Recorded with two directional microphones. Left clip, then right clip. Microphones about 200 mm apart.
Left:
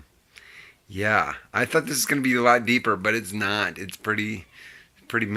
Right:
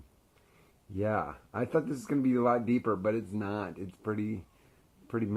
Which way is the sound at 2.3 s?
25° left (ahead or behind).